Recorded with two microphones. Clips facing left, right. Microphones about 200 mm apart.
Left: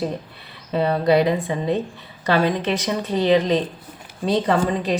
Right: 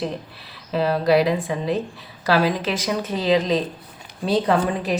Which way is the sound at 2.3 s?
5° right (ahead or behind).